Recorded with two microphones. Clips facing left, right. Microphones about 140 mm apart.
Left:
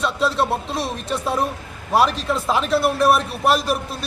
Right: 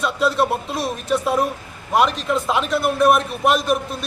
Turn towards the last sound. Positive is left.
turn(degrees=0)  # may be behind; listen again after turning